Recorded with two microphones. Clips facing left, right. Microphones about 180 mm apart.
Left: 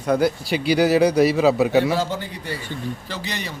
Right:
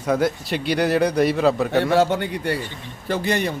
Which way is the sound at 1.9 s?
65° right (ahead or behind).